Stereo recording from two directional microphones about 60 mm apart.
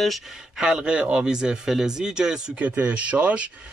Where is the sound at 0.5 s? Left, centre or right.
Centre.